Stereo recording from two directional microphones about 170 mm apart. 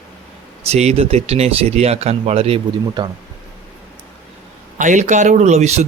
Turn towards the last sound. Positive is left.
turn(degrees=-40)  # may be behind; listen again after turning